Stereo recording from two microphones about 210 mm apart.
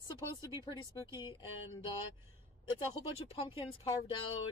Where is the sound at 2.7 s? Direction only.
25° left (ahead or behind).